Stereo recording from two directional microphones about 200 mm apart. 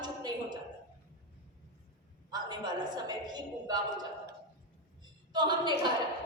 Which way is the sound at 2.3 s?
20° right (ahead or behind).